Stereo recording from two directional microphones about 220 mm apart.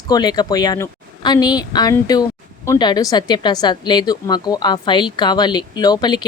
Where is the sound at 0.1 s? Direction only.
20° left (ahead or behind).